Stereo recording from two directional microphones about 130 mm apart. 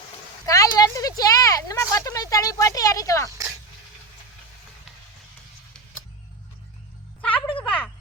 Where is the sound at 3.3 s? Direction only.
25° right (ahead or behind).